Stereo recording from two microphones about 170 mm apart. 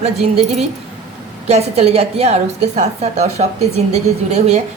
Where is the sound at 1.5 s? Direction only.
40° right (ahead or behind).